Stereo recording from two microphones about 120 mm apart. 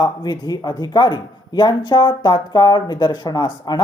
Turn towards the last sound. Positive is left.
turn(degrees=35)  # may be behind; listen again after turning